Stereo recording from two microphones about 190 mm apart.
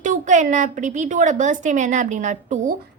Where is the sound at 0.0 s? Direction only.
40° right (ahead or behind).